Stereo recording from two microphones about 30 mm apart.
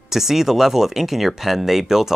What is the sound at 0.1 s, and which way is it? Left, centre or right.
Speech, centre.